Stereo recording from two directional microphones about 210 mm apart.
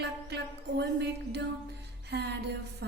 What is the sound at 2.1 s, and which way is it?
Music, 55° right (ahead or behind).